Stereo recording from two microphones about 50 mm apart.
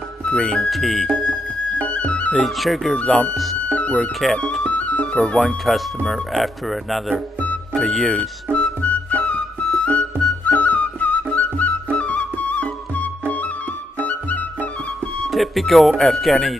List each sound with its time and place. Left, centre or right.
0.2 s speech: centre
1.8 s music: left
2.3 s speech: centre
3.7 s music: left
4.2 s speech: centre
4.6 s music: left
5.0 s speech: centre
6.0 s speech: centre
8.5 s music: left
15.2 s speech: centre